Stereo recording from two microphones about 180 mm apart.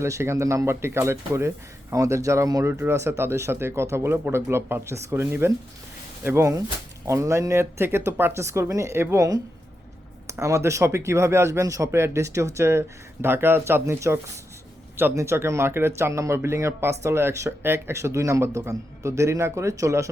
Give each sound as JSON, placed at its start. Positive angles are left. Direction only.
{"t": 0.0, "sound": "speech", "side_deg": -15}